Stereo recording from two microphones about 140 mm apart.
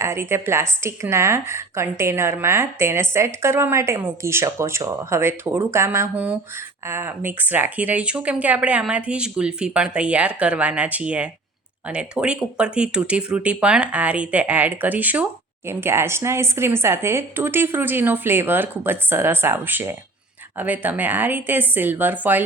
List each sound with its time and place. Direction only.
0.0 s a woman's voice: 20° right (ahead or behind)